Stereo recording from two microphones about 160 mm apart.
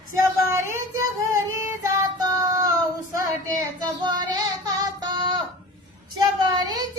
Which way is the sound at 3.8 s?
25° right (ahead or behind).